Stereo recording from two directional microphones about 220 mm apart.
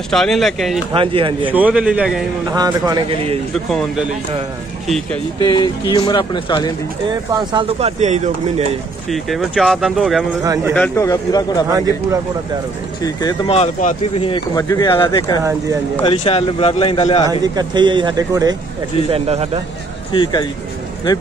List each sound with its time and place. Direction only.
0.1 s speech: centre (ahead or behind)
0.9 s speech: 25° right (ahead or behind)
1.5 s speech: 5° right (ahead or behind)
2.5 s speech: 20° right (ahead or behind)
3.5 s speech: centre (ahead or behind)
5.5 s speech: 20° left (ahead or behind)
7.3 s speech: 25° right (ahead or behind)
9.1 s speech: centre (ahead or behind)
10.4 s speech: 15° right (ahead or behind)
10.7 s a man's voice: 10° left (ahead or behind)
13.0 s speech: 15° left (ahead or behind)
17.3 s speech: 20° right (ahead or behind)
19.1 s speech: 25° right (ahead or behind)
20.1 s speech: 20° left (ahead or behind)